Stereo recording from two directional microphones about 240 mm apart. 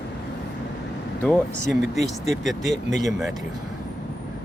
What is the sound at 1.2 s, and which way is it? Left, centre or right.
Speech, centre.